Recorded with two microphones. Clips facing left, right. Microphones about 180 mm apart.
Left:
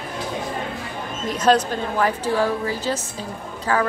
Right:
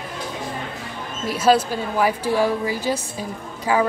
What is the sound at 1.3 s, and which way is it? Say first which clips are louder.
A woman's voice: right 1 dB; 5° right (ahead or behind).